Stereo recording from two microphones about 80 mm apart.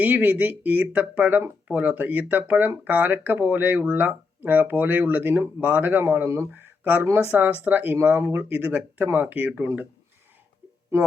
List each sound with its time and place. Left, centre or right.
0.0 s speech: right